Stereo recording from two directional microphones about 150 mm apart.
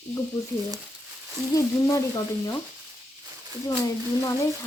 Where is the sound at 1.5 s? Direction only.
20° left (ahead or behind).